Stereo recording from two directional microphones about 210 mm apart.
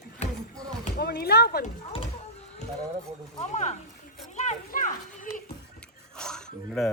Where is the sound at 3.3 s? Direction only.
35° left (ahead or behind).